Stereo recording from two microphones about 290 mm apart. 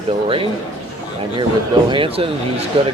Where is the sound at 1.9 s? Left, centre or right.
Centre.